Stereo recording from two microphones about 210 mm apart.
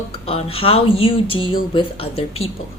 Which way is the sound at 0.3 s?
25° left (ahead or behind).